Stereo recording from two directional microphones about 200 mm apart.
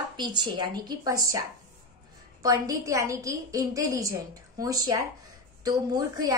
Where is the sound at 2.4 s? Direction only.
15° right (ahead or behind).